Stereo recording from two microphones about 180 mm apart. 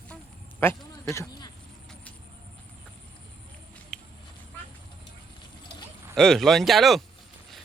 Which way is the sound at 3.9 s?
Centre (ahead or behind).